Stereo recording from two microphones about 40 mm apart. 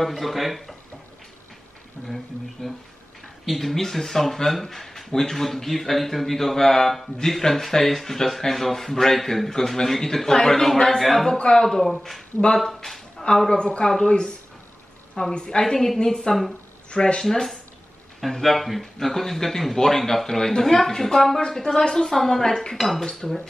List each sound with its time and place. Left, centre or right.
0.0 s speech: centre
2.0 s speech: centre
11.3 s speech: left
11.6 s speech: centre
13.5 s speech: left
15.3 s speech: left
15.6 s speech: centre
16.9 s speech: left
17.2 s speech: centre